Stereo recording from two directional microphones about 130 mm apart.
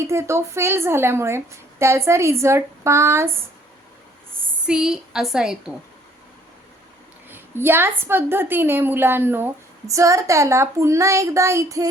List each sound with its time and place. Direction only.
0.1 s speech: 20° right (ahead or behind)
4.6 s a woman's voice: 5° right (ahead or behind)
7.3 s a woman's voice: 15° right (ahead or behind)